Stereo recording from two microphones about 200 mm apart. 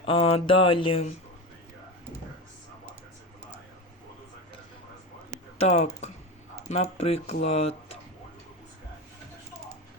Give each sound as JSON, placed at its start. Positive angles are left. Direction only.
{"t": 0.0, "sound": "mantra", "side_deg": 30}
{"t": 5.5, "sound": "speech", "side_deg": 30}